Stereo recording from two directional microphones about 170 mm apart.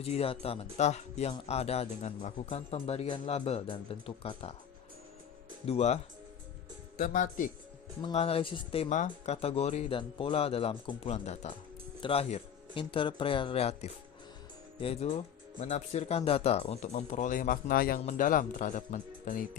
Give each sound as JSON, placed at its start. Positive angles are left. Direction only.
{"t": 0.0, "sound": "speech", "side_deg": 35}
{"t": 5.6, "sound": "speech", "side_deg": 40}
{"t": 8.0, "sound": "speech", "side_deg": 35}
{"t": 18.0, "sound": "speech", "side_deg": 45}